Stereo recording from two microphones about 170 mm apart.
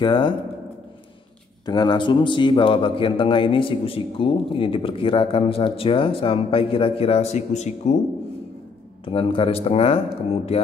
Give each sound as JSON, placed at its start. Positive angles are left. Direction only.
{"t": 0.0, "sound": "speech", "side_deg": 30}
{"t": 1.7, "sound": "a man's voice", "side_deg": 25}
{"t": 9.0, "sound": "a man's voice", "side_deg": 30}